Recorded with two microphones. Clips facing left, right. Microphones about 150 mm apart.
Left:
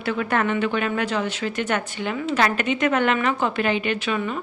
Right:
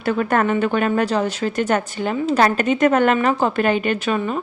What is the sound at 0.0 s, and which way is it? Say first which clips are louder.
A woman's voice: right 4 dB; 45° right (ahead or behind).